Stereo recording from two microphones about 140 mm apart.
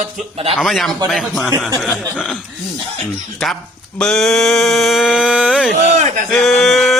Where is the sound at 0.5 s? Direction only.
5° left (ahead or behind).